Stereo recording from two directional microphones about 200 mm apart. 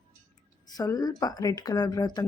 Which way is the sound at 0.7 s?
20° left (ahead or behind).